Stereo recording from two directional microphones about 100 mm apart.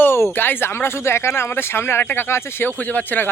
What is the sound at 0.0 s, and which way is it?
Speech, 25° left (ahead or behind).